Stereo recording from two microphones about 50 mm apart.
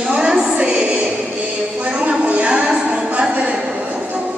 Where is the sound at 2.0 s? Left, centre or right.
Right.